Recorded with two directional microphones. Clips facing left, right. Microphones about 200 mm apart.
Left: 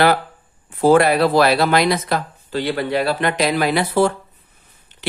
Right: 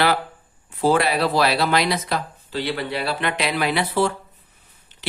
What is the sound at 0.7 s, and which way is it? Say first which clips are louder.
Speech: left 6 dB; 50° left (ahead or behind).